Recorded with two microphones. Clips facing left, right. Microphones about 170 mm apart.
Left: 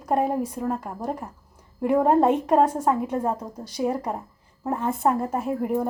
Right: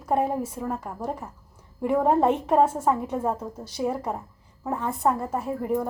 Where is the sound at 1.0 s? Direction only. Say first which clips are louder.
Left 2 dB; centre (ahead or behind).